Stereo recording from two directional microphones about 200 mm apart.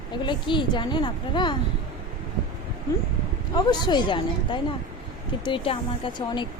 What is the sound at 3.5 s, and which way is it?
Speech, 20° left (ahead or behind).